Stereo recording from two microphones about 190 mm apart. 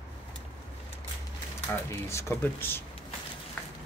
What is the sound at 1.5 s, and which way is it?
Speech, 15° left (ahead or behind).